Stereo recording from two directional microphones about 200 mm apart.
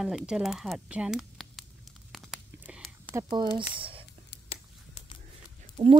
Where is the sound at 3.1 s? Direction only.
20° right (ahead or behind).